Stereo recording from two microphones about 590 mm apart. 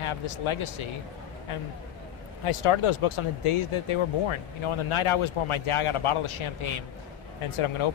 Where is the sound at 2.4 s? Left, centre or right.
Left.